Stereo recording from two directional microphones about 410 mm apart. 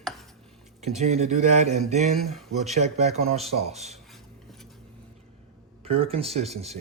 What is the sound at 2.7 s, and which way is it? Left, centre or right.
Speech, centre.